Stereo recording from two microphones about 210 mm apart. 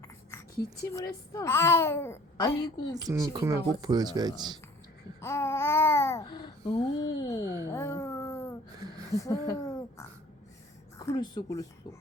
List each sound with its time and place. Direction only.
0.9 s babbling: 15° left (ahead or behind)
3.1 s speech: 15° right (ahead or behind)
5.2 s babbling: 15° left (ahead or behind)
7.7 s a sound: 15° left (ahead or behind)
10.9 s a woman's voice: 15° left (ahead or behind)